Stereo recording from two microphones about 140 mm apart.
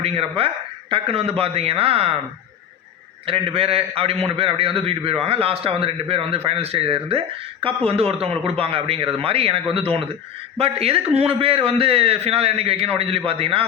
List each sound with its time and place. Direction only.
0.0 s a man's voice: 45° right (ahead or behind)
3.2 s a man's voice: 40° right (ahead or behind)